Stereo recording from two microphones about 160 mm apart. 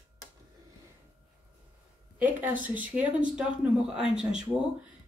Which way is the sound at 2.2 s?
10° right (ahead or behind).